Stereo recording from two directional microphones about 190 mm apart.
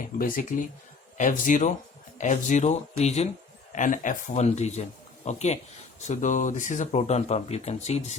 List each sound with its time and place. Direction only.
0.2 s speech: 45° left (ahead or behind)